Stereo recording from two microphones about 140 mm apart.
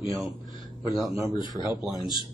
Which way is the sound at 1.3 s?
30° left (ahead or behind).